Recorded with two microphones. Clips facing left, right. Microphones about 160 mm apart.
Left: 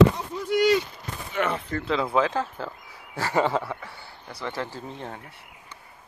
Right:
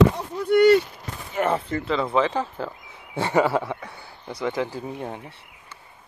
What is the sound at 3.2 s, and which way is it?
Speech, 25° right (ahead or behind).